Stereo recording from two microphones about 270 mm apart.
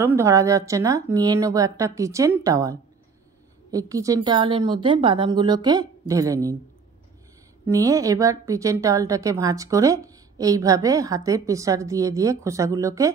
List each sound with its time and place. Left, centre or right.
0.0 s a woman's voice: centre
7.7 s a woman's voice: centre